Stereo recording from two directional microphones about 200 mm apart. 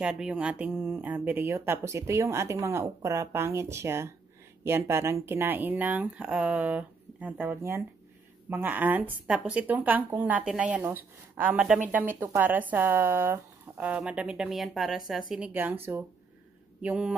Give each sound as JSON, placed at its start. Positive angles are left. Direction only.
{"t": 0.0, "sound": "speech", "side_deg": -5}